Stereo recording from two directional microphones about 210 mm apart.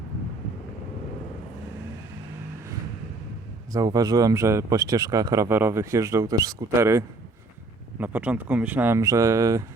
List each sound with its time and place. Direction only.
3.7 s speech: 15° right (ahead or behind)